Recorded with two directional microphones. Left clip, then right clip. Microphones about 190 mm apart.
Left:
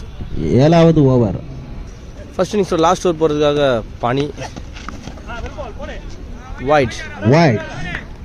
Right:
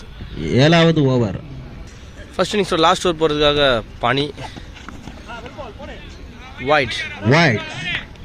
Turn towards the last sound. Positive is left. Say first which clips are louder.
# right 2 dB
turn(degrees=30)  # may be behind; listen again after turning